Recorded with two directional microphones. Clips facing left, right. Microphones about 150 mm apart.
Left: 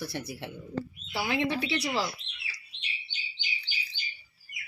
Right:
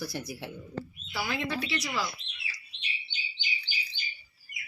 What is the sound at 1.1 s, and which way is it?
Speech, 25° left (ahead or behind).